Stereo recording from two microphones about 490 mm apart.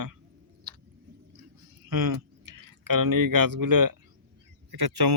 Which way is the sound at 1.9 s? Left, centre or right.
Right.